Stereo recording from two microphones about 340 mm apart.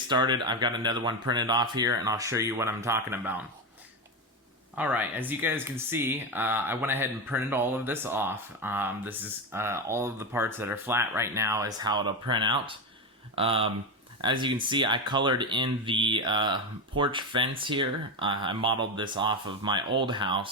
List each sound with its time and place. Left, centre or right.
0.1 s speech: centre
4.7 s speech: centre